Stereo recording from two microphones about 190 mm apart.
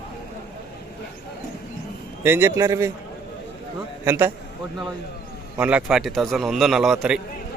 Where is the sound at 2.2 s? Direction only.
10° right (ahead or behind).